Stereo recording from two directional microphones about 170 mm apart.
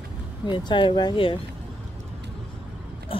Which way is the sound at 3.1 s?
30° left (ahead or behind).